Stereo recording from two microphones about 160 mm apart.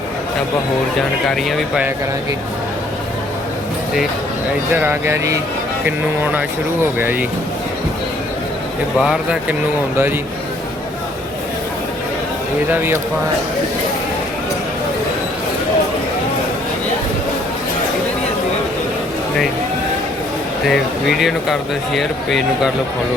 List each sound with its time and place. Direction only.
1.5 s speech: 5° right (ahead or behind)
4.7 s speech: 15° right (ahead or behind)
9.0 s speech: 5° right (ahead or behind)
12.7 s speech: 15° right (ahead or behind)
20.7 s speech: centre (ahead or behind)